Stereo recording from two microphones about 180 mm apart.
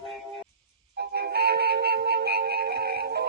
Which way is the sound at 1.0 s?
60° right (ahead or behind).